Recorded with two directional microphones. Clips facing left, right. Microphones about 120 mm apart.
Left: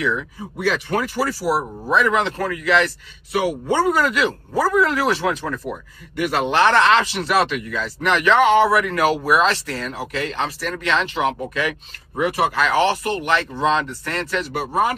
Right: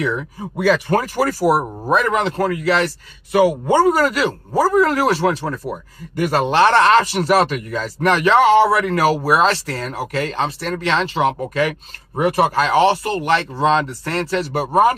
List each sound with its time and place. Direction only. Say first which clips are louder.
0.0 s speech: right 1 dB; 35° right (ahead or behind)
12.2 s speech: right 3 dB; 50° right (ahead or behind)
12.6 s speech: right 3 dB; 30° right (ahead or behind)